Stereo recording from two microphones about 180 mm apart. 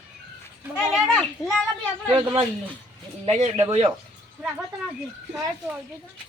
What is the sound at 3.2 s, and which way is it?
Speech, 35° right (ahead or behind).